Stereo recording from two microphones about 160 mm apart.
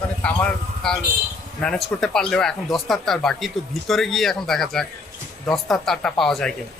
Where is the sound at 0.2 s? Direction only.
5° left (ahead or behind).